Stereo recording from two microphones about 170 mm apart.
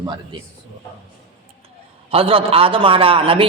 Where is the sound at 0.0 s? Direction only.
25° right (ahead or behind).